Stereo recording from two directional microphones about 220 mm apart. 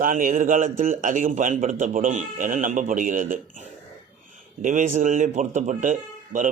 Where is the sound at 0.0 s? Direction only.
40° right (ahead or behind).